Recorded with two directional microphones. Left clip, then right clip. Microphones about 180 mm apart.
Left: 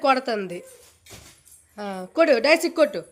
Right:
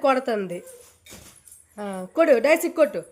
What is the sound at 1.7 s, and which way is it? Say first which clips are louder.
Speech: left 1 dB; 10° right (ahead or behind).